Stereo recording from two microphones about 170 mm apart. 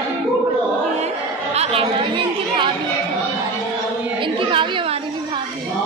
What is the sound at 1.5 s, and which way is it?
Speech, 35° right (ahead or behind).